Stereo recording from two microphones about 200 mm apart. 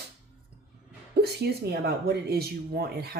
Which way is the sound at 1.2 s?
55° right (ahead or behind).